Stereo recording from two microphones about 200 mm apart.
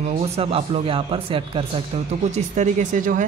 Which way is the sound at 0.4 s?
30° right (ahead or behind).